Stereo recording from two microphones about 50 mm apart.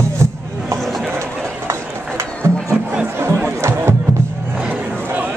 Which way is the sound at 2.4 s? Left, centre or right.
Right.